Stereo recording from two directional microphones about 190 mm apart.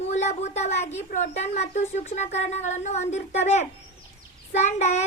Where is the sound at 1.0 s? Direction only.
35° left (ahead or behind).